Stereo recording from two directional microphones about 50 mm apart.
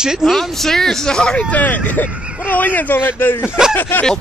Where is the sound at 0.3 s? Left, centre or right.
Centre.